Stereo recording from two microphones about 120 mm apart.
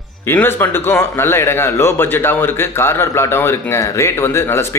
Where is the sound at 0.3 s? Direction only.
20° left (ahead or behind).